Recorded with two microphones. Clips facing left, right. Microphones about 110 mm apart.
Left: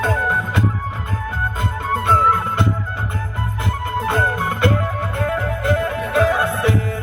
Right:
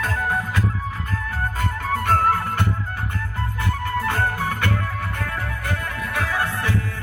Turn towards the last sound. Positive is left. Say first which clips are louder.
# left 6 dB
turn(degrees=20)  # may be behind; listen again after turning